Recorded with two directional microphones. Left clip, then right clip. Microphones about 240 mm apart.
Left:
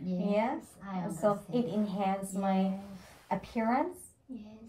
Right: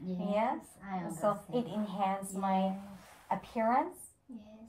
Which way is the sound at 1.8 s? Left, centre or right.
Centre.